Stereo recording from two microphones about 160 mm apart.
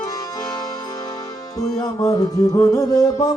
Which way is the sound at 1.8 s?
25° left (ahead or behind).